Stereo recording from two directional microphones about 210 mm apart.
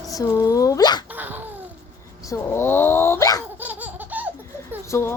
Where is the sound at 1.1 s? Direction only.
10° right (ahead or behind).